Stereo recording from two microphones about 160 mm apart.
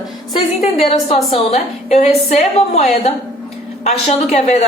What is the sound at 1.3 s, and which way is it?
A woman's voice, 40° left (ahead or behind).